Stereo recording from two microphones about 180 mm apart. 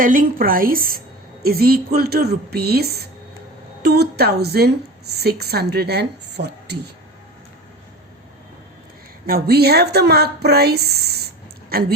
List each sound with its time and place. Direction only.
0.0 s a woman's voice: 50° right (ahead or behind); by 6.9 s 65° right (ahead or behind)
9.2 s a woman's voice: 60° right (ahead or behind)